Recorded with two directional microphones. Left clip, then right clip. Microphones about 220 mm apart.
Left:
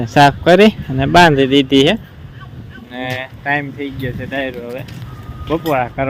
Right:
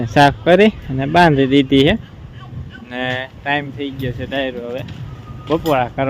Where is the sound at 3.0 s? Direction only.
25° right (ahead or behind).